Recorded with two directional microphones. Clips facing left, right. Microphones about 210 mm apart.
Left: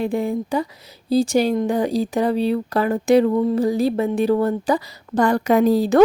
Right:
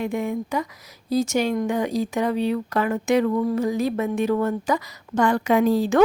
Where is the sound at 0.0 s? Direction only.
35° left (ahead or behind).